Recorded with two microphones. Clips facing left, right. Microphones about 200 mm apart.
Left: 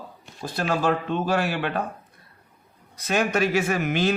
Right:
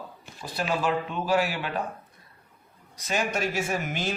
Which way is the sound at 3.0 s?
65° left (ahead or behind).